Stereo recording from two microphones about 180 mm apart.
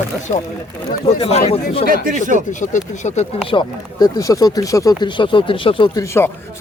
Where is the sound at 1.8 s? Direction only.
50° right (ahead or behind).